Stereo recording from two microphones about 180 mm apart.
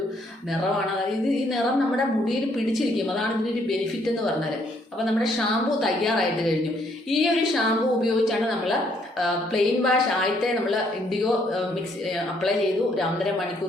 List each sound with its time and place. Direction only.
5.8 s a woman's voice: centre (ahead or behind)